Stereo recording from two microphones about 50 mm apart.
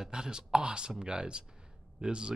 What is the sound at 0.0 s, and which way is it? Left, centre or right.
Speech, centre.